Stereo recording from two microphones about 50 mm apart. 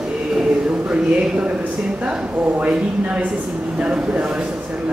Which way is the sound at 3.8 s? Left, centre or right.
Right.